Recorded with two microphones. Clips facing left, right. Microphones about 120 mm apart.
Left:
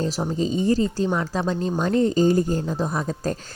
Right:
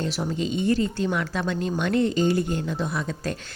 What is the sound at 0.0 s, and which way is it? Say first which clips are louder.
A woman's voice: left 3 dB; 35° left (ahead or behind).